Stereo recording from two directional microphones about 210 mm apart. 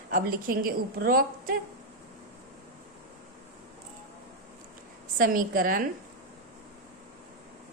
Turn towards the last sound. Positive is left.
turn(degrees=-40)  # may be behind; listen again after turning